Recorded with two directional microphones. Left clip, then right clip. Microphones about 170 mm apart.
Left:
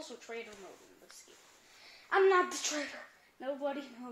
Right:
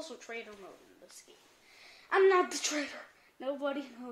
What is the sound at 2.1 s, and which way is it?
Speech, 15° right (ahead or behind).